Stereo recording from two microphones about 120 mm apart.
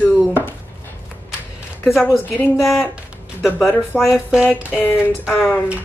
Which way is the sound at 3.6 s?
Centre (ahead or behind).